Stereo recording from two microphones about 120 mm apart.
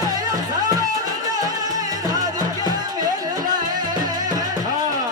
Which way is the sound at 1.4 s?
30° right (ahead or behind).